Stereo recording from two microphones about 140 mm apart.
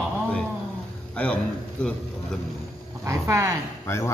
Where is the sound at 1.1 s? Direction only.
10° left (ahead or behind).